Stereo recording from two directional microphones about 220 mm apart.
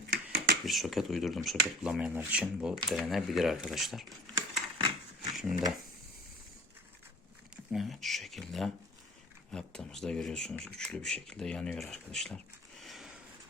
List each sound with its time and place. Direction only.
0.1 s a sound: 45° right (ahead or behind)
0.6 s speech: centre (ahead or behind)
5.4 s speech: centre (ahead or behind)
7.7 s speech: centre (ahead or behind)